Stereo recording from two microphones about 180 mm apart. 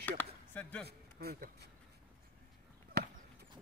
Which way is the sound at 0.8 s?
60° right (ahead or behind).